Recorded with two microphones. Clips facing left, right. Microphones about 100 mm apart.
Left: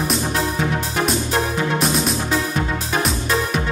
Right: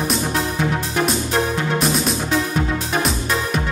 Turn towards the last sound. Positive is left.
turn(degrees=0)  # may be behind; listen again after turning